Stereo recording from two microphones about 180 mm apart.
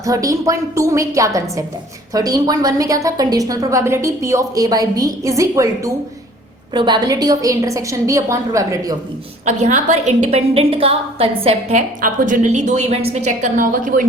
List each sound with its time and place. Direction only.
0.0 s a woman's voice: 20° right (ahead or behind)
9.5 s a woman's voice: 40° right (ahead or behind)
11.9 s a woman's voice: 45° right (ahead or behind)